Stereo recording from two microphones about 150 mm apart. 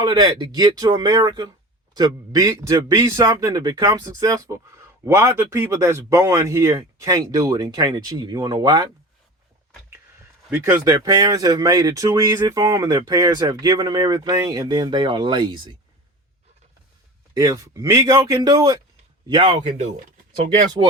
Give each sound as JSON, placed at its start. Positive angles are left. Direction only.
{"t": 0.0, "sound": "speech", "side_deg": -30}
{"t": 10.5, "sound": "speech", "side_deg": -15}
{"t": 17.3, "sound": "speech", "side_deg": -20}
{"t": 19.3, "sound": "speech", "side_deg": -35}